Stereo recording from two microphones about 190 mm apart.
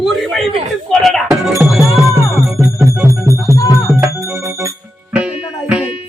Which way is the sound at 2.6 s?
15° right (ahead or behind).